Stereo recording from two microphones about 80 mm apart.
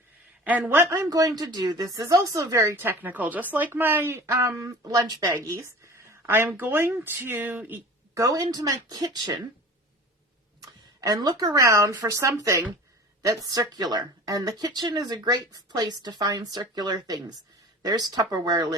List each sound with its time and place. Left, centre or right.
0.7 s speech: right
2.7 s a woman's voice: right
8.1 s speech: right
11.0 s speech: right